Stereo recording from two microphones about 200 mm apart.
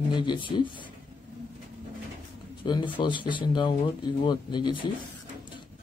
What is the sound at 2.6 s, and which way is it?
Speech, 25° left (ahead or behind).